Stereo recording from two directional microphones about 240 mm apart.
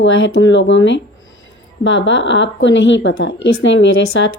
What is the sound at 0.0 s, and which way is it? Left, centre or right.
Speech, left.